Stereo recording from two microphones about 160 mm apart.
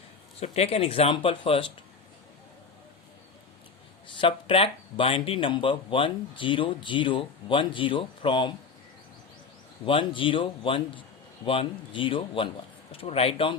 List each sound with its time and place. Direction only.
0.3 s speech: 40° left (ahead or behind)
4.2 s speech: 30° left (ahead or behind)
9.8 s speech: 30° left (ahead or behind)